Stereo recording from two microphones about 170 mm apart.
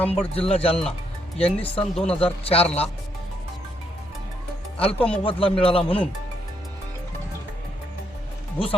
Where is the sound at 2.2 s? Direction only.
35° left (ahead or behind).